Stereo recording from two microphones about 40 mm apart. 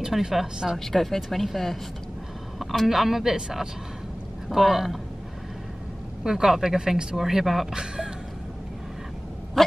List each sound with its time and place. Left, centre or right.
0.0 s speech: centre
0.7 s speech: centre
6.2 s speech: centre
7.2 s speech: centre
7.7 s speech: centre